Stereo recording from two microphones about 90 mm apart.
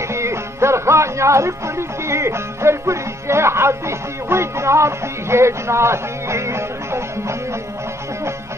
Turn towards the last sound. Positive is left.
turn(degrees=-30)  # may be behind; listen again after turning